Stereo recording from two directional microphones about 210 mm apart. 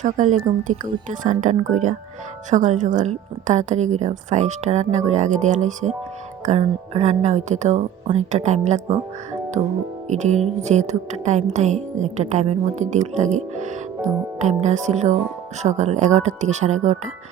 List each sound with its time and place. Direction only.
0.0 s music: 35° right (ahead or behind)